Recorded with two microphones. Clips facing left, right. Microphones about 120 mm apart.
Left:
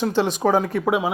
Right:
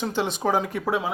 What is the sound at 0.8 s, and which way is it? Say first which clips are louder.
Speech: left 4 dB; 15° left (ahead or behind).